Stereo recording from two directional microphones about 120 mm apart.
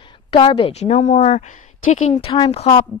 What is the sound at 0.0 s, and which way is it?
A woman's voice, 45° left (ahead or behind).